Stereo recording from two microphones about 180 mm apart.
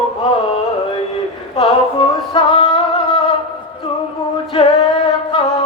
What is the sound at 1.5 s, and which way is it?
Music, 30° left (ahead or behind).